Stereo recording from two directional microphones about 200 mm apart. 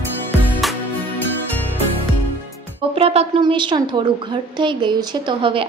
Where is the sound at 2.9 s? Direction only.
30° right (ahead or behind).